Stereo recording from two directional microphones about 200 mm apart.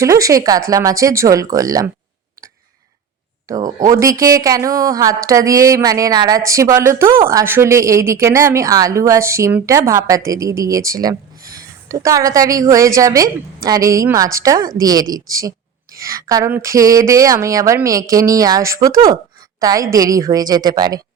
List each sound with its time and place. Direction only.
0.0 s a woman's voice: 15° right (ahead or behind)
3.5 s a woman's voice: 20° right (ahead or behind)